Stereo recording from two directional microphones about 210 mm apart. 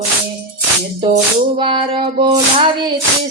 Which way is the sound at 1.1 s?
25° right (ahead or behind).